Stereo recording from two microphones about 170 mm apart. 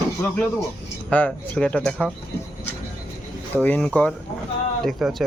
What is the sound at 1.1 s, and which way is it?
Speech, 10° left (ahead or behind).